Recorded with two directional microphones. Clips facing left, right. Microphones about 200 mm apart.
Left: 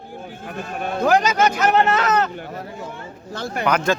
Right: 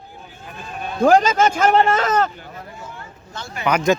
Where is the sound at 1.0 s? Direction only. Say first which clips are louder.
Right 4 dB; 45° right (ahead or behind).